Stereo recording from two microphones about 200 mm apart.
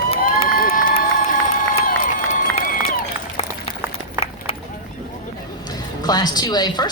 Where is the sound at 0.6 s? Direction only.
45° left (ahead or behind).